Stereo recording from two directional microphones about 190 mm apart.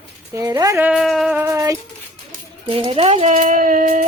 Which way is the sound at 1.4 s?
15° right (ahead or behind).